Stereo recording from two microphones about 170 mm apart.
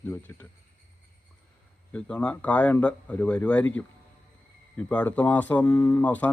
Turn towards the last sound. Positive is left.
turn(degrees=10)  # may be behind; listen again after turning